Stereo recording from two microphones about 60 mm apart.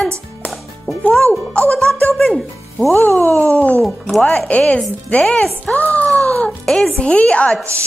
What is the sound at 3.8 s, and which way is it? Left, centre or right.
Speech, centre.